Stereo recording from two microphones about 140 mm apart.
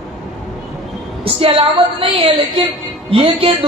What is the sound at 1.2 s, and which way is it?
A woman's voice, 40° right (ahead or behind).